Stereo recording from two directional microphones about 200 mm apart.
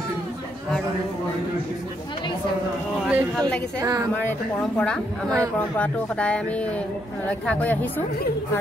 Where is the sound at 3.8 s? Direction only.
15° right (ahead or behind).